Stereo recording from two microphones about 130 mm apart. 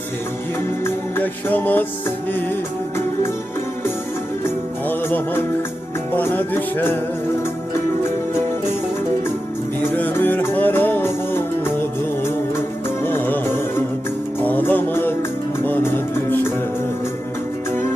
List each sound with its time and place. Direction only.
0.9 s music: 15° left (ahead or behind)
4.4 s music: 15° left (ahead or behind)
9.9 s music: 15° left (ahead or behind)